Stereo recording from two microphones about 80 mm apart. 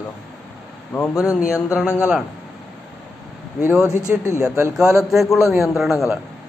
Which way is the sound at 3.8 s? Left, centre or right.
Left.